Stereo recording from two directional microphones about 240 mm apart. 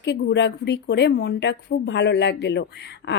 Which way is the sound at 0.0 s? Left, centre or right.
Left.